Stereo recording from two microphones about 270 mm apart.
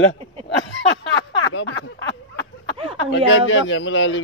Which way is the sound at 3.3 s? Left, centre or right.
Left.